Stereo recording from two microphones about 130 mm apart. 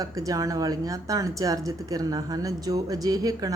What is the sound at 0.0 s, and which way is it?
Speech, 25° right (ahead or behind).